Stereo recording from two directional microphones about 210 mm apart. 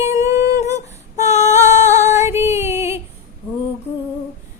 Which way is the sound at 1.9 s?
15° right (ahead or behind).